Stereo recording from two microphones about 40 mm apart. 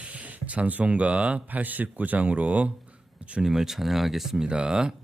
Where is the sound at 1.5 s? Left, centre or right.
Right.